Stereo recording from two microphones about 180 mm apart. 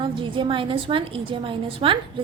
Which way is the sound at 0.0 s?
30° right (ahead or behind).